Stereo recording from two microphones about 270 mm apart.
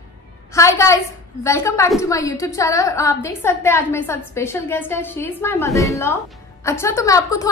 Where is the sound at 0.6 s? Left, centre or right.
Centre.